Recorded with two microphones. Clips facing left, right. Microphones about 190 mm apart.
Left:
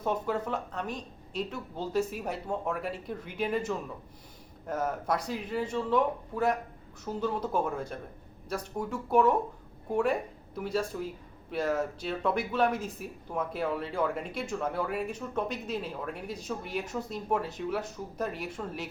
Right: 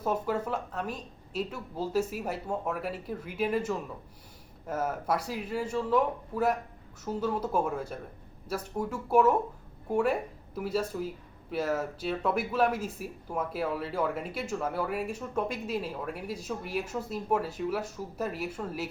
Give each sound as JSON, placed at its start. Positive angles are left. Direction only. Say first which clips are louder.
{"t": 0.0, "sound": "speech", "louder": "right 1 dB", "side_deg": -5}